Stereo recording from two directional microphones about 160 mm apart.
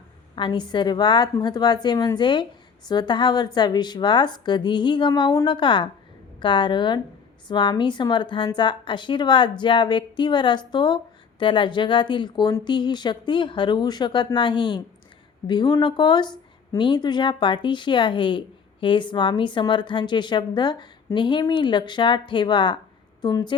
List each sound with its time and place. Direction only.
0.3 s speech: 30° left (ahead or behind)